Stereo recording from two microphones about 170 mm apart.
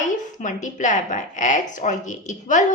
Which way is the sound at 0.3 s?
45° left (ahead or behind).